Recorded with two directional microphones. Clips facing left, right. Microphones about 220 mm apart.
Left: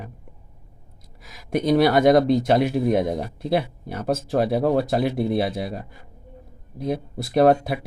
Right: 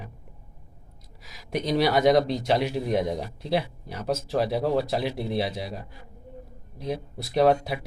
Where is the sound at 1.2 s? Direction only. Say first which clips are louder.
Left 6 dB; 50° left (ahead or behind).